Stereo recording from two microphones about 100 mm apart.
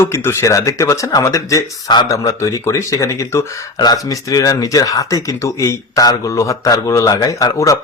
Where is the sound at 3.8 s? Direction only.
40° left (ahead or behind).